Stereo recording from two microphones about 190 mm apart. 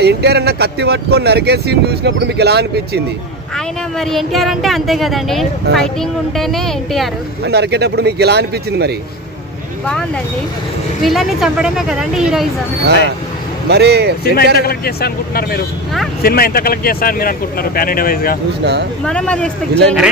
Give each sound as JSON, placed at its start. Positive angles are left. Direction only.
{"t": 0.0, "sound": "speech", "side_deg": -60}
{"t": 3.5, "sound": "speech", "side_deg": 0}
{"t": 7.4, "sound": "speech", "side_deg": -60}
{"t": 11.1, "sound": "speech", "side_deg": 0}
{"t": 13.7, "sound": "speech", "side_deg": -60}
{"t": 14.2, "sound": "speech", "side_deg": 55}
{"t": 18.6, "sound": "speech", "side_deg": -65}
{"t": 19.0, "sound": "speech", "side_deg": 5}